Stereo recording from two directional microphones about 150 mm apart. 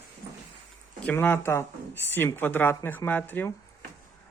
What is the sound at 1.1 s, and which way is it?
Speech, 15° left (ahead or behind).